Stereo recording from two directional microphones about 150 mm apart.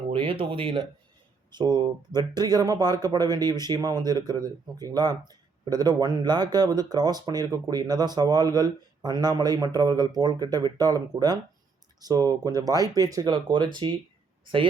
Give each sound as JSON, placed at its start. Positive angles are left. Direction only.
{"t": 0.1, "sound": "speech", "side_deg": -35}